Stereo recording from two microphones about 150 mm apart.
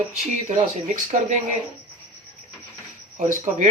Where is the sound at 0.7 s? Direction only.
50° right (ahead or behind).